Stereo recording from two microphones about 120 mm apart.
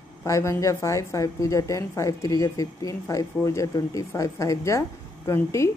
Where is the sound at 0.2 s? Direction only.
25° left (ahead or behind).